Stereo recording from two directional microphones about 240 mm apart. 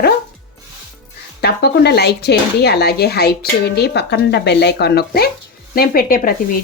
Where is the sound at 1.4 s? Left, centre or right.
Left.